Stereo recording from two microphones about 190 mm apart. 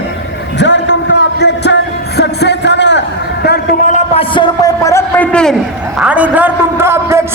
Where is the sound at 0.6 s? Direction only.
65° left (ahead or behind).